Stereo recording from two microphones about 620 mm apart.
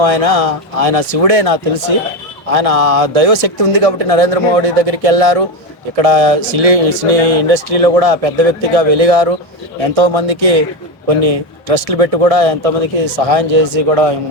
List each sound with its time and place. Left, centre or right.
0.0 s speech: right